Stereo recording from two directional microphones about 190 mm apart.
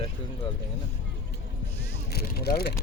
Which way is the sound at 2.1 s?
55° left (ahead or behind).